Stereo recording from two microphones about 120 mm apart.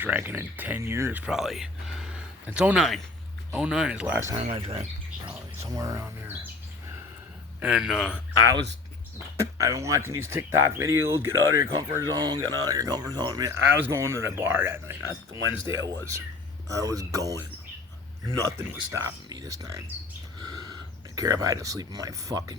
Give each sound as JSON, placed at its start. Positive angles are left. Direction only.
{"t": 0.0, "sound": "speech", "side_deg": -15}
{"t": 1.3, "sound": "a sound", "side_deg": -5}
{"t": 3.5, "sound": "speech", "side_deg": -5}
{"t": 4.4, "sound": "speech", "side_deg": -60}
{"t": 5.7, "sound": "speech", "side_deg": -25}
{"t": 7.6, "sound": "speech", "side_deg": -5}
{"t": 9.4, "sound": "speech", "side_deg": -25}
{"t": 11.8, "sound": "speech", "side_deg": -35}
{"t": 13.7, "sound": "speech", "side_deg": -20}
{"t": 15.6, "sound": "speech", "side_deg": 35}
{"t": 16.6, "sound": "speech", "side_deg": -30}
{"t": 18.3, "sound": "speech", "side_deg": -25}
{"t": 21.2, "sound": "speech", "side_deg": -30}